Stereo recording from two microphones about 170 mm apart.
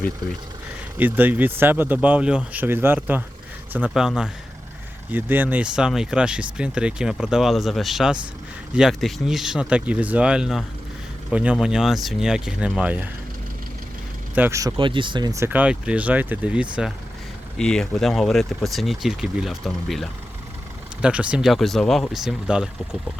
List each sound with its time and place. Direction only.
0.9 s speech: 10° right (ahead or behind)
14.3 s speech: 15° right (ahead or behind)
14.8 s speech: 30° right (ahead or behind); by 16.6 s 10° right (ahead or behind)
17.6 s speech: 5° left (ahead or behind)